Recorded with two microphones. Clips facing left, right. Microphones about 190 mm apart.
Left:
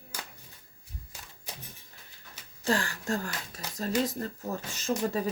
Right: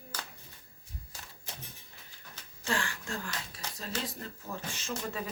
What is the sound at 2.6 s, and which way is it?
Speech, 40° left (ahead or behind).